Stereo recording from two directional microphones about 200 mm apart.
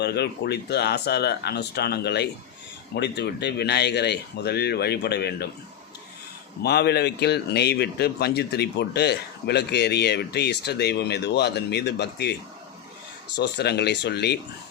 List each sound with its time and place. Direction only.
0.0 s speech: 55° left (ahead or behind)
6.6 s speech: 55° left (ahead or behind)